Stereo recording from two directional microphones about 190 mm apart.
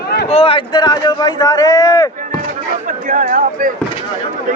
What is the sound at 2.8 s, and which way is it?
Speech, 45° right (ahead or behind).